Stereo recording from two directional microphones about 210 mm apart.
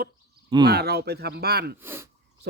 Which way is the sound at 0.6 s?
50° right (ahead or behind).